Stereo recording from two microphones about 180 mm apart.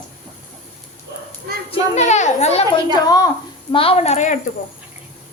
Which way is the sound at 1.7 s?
40° left (ahead or behind).